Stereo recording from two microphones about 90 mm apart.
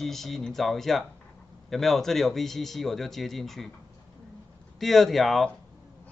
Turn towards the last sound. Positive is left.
turn(degrees=0)  # may be behind; listen again after turning